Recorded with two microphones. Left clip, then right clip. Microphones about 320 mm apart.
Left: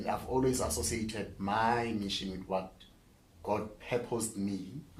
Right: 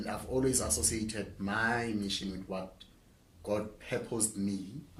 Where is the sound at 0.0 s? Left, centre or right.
Centre.